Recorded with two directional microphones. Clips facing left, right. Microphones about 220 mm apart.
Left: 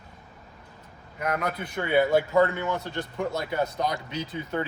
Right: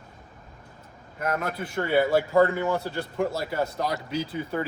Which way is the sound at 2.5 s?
35° right (ahead or behind).